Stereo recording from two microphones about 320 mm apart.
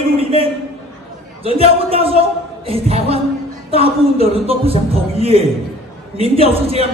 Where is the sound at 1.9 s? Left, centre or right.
Centre.